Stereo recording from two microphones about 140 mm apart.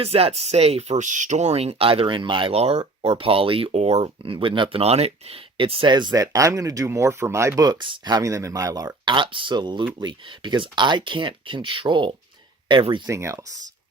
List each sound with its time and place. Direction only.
0.0 s speech: 45° right (ahead or behind)
4.0 s speech: 40° right (ahead or behind)
13.1 s speech: 20° right (ahead or behind)